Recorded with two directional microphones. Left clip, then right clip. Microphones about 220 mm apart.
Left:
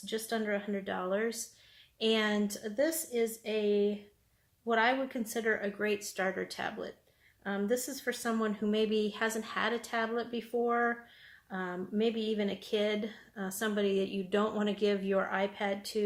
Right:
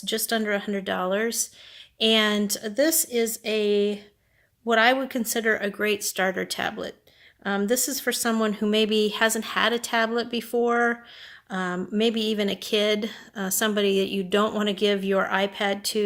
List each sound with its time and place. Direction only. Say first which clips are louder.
0.0 s speech: right 9 dB; 45° right (ahead or behind)